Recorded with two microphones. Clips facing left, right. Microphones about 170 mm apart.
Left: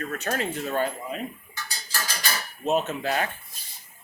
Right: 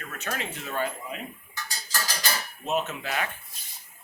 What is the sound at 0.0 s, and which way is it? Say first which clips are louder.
Speech: left 6 dB; 40° left (ahead or behind).